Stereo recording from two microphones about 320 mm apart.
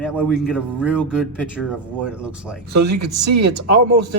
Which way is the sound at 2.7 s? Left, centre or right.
Right.